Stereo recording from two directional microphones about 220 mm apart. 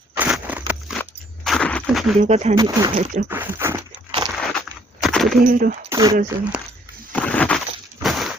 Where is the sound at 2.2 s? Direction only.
30° right (ahead or behind).